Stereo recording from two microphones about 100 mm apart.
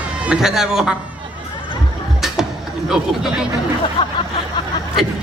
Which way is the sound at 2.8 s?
5° right (ahead or behind).